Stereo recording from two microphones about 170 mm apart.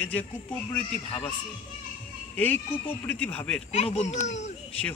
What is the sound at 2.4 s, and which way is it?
A man's voice, 10° left (ahead or behind).